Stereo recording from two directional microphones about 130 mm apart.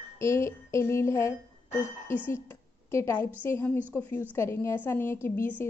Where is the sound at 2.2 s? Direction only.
20° left (ahead or behind).